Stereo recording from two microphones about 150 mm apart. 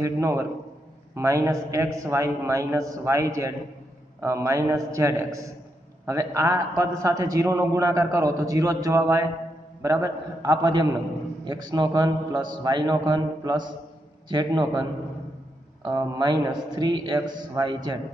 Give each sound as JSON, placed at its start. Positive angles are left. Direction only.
{"t": 0.0, "sound": "a man's voice", "side_deg": -20}